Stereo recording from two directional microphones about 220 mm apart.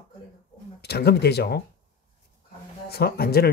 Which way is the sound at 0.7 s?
45° left (ahead or behind).